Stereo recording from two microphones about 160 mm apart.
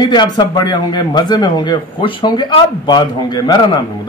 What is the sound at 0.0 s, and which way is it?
A man's voice, 30° left (ahead or behind).